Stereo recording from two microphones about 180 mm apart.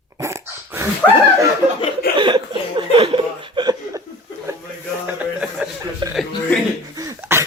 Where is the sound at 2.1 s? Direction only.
25° right (ahead or behind).